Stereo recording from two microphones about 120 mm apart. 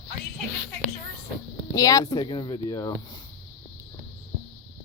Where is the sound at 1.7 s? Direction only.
30° left (ahead or behind).